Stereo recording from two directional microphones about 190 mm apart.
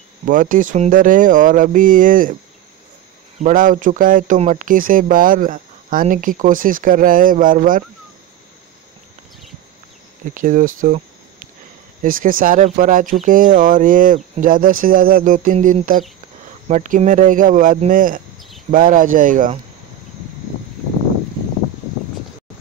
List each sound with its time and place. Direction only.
0.3 s speech: 45° right (ahead or behind)
3.3 s speech: 45° right (ahead or behind)
10.3 s speech: 45° right (ahead or behind)